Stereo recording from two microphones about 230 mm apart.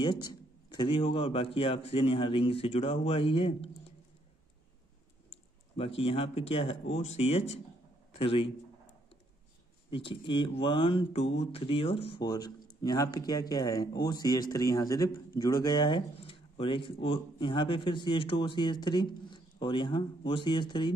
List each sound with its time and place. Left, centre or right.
0.0 s speech: centre
5.8 s speech: left
9.8 s speech: left